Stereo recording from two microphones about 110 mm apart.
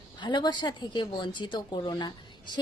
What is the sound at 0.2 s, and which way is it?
Speech, 40° left (ahead or behind).